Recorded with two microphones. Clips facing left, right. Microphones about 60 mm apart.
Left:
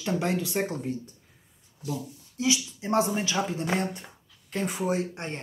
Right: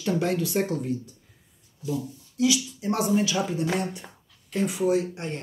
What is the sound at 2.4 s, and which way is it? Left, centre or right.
Speech, left.